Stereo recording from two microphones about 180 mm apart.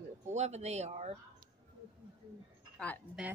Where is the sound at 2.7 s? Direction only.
10° left (ahead or behind).